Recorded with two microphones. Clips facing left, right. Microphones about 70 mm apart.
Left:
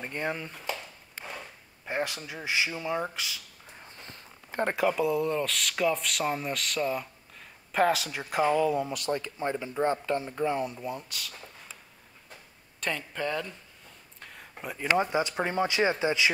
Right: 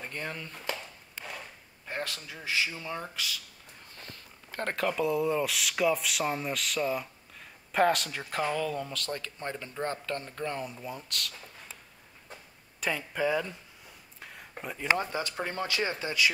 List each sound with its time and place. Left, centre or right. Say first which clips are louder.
0.0 s speech: left 5 dB; left
1.9 s speech: left 5 dB; centre
12.8 s speech: right 2 dB; centre
14.2 s a sound: even; centre
14.6 s speech: left 2 dB; centre
15.0 s speech: left 6 dB; centre